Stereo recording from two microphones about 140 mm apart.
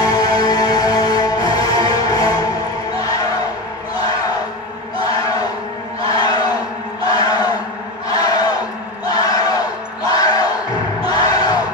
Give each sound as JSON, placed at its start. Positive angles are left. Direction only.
{"t": 0.0, "sound": "music", "side_deg": 25}
{"t": 6.1, "sound": "a sound", "side_deg": 30}
{"t": 8.1, "sound": "crowd", "side_deg": 30}
{"t": 10.1, "sound": "music", "side_deg": 30}
{"t": 11.1, "sound": "crowd", "side_deg": 30}